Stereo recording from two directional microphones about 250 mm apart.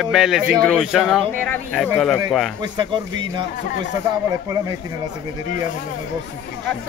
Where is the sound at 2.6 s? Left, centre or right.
Centre.